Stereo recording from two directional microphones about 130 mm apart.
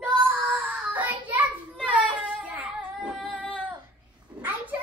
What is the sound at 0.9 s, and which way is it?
Child singing, 15° right (ahead or behind).